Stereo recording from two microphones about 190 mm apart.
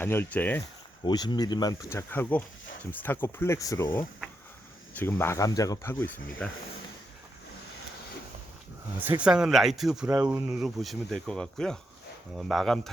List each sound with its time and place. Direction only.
0.0 s speech: 10° left (ahead or behind)
1.0 s speech: 20° left (ahead or behind)
9.2 s speech: 5° right (ahead or behind)